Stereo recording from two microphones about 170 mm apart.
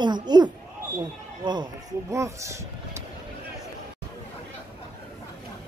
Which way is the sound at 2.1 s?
15° right (ahead or behind).